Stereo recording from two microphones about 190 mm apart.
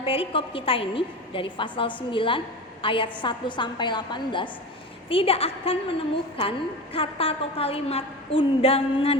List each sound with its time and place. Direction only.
0.0 s a woman's voice: 30° left (ahead or behind)